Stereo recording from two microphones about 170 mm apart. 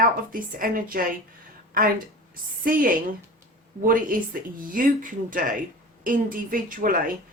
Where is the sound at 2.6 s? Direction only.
55° right (ahead or behind).